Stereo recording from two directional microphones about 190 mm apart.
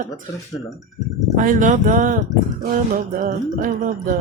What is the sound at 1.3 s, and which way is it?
Music, 45° right (ahead or behind).